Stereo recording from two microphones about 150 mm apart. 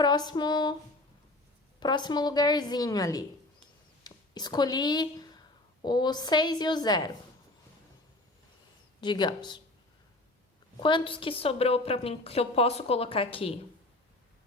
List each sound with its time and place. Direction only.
0.0 s a woman's voice: 30° left (ahead or behind)
1.8 s a woman's voice: 30° left (ahead or behind)
9.0 s a woman's voice: 30° left (ahead or behind)
10.8 s a woman's voice: 35° left (ahead or behind)